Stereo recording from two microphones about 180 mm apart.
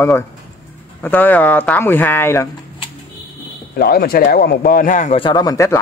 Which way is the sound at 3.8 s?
60° left (ahead or behind).